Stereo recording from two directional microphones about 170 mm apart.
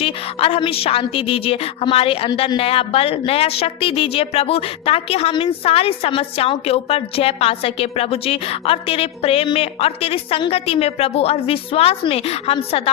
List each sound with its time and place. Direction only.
0.0 s a woman's voice: 35° left (ahead or behind)